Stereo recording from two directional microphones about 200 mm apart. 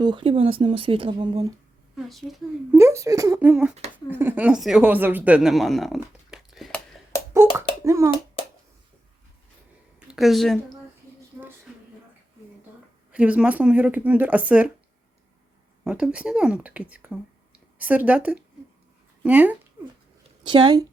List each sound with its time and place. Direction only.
0.0 s speech: 25° right (ahead or behind)
2.0 s speech: centre (ahead or behind)
2.7 s speech: 15° right (ahead or behind)
7.9 s hands: 15° right (ahead or behind)
10.1 s a woman's voice: centre (ahead or behind)
13.1 s speech: 5° right (ahead or behind)
15.8 s speech: 5° right (ahead or behind)
20.4 s speech: 20° right (ahead or behind)